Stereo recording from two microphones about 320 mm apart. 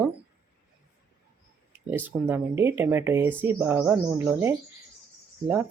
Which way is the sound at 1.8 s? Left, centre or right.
Centre.